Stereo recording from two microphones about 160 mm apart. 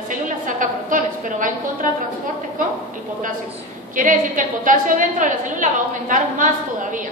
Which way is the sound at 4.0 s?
55° right (ahead or behind).